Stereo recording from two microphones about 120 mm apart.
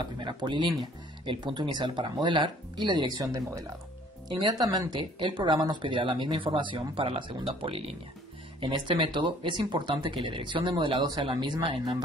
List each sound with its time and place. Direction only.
0.0 s speech: 40° right (ahead or behind)